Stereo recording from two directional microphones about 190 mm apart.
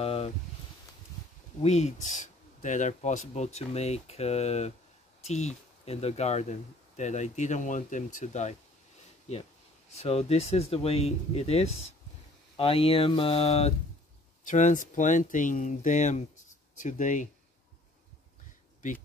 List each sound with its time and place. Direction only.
0.0 s a sound: 30° left (ahead or behind)
1.6 s speech: 35° left (ahead or behind)
9.9 s speech: 35° left (ahead or behind)